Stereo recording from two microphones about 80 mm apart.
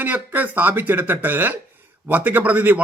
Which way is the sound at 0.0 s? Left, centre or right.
Right.